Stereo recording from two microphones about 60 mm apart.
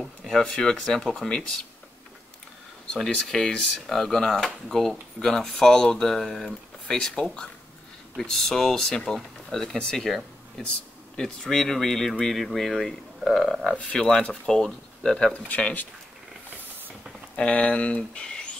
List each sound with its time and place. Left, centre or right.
0.0 s a sound: centre
0.4 s speech: centre
2.9 s speech: centre
15.4 s speech: left
17.4 s speech: left